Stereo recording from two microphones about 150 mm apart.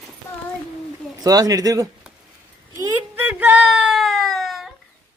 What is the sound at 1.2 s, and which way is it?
Speech, 25° right (ahead or behind).